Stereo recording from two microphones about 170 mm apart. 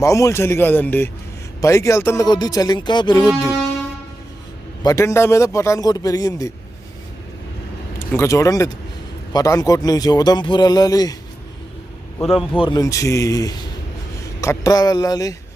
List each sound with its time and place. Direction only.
0.0 s a man's voice: 20° left (ahead or behind)
4.8 s speech: 20° left (ahead or behind)
7.9 s speech: 15° left (ahead or behind)
12.5 s speech: 25° left (ahead or behind)